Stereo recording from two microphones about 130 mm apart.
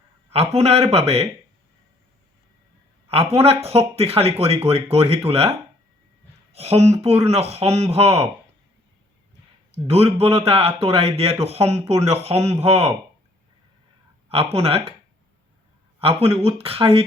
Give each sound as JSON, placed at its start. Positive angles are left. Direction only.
{"t": 0.3, "sound": "a man's voice", "side_deg": -55}
{"t": 3.1, "sound": "a man's voice", "side_deg": -50}
{"t": 9.7, "sound": "a man's voice", "side_deg": -50}
{"t": 14.3, "sound": "a man's voice", "side_deg": -50}
{"t": 16.0, "sound": "a man's voice", "side_deg": -50}